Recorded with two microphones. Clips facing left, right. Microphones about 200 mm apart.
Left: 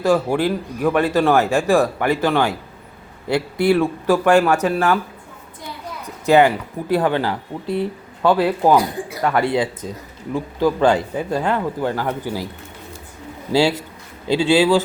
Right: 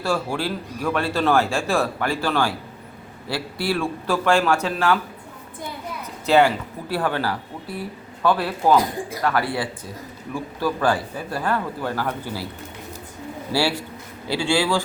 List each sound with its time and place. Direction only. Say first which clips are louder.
0.0 s a man's voice: left 7 dB; 20° left (ahead or behind)
6.2 s speech: left 3 dB; 15° left (ahead or behind)
13.5 s speech: left 6 dB; 20° left (ahead or behind)